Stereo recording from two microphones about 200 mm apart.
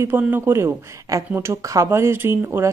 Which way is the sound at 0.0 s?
10° right (ahead or behind).